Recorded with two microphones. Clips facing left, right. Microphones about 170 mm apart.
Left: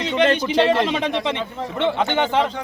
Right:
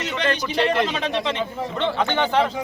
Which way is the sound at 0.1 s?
25° left (ahead or behind).